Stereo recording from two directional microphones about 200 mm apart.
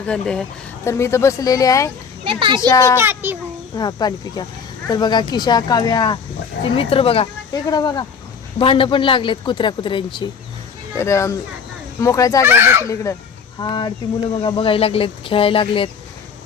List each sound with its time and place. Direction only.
0.0 s speech: 5° left (ahead or behind)
2.2 s a child's voice: 25° right (ahead or behind)
2.6 s speech: 15° left (ahead or behind)
3.0 s a child's voice: 10° right (ahead or behind)
3.8 s speech: 20° left (ahead or behind)
12.5 s a child's voice: 10° right (ahead or behind)
12.8 s speech: 15° left (ahead or behind)